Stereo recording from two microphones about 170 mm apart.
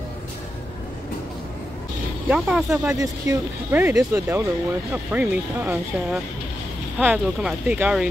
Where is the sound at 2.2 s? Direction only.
5° right (ahead or behind).